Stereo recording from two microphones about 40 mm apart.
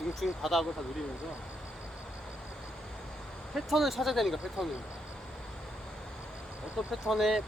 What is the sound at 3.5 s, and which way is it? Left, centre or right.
Speech, centre.